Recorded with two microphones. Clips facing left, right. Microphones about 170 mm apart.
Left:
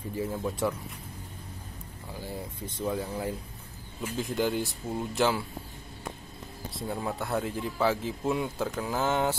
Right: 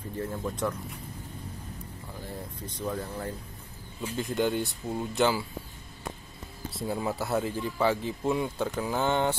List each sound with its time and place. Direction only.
0.1 s speech: 5° left (ahead or behind)
2.8 s speech: 10° left (ahead or behind)
6.7 s speech: centre (ahead or behind)